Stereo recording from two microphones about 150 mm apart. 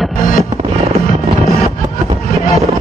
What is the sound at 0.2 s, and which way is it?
Music, 70° left (ahead or behind).